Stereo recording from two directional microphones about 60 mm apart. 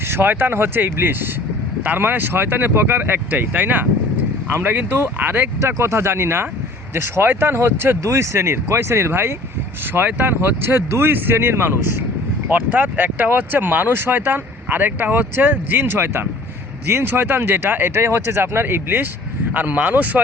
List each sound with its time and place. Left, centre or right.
0.1 s speech: right
5.5 s speech: right
9.9 s speech: right
12.5 s speech: right
19.5 s speech: right